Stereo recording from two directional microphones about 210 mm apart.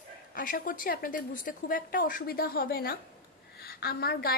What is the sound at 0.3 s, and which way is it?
A woman's voice, 40° left (ahead or behind).